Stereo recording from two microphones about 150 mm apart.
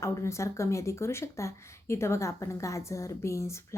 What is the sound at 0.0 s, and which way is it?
A woman's voice, 20° left (ahead or behind).